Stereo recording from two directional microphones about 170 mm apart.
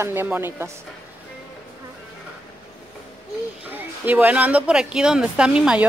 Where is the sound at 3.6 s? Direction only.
10° right (ahead or behind).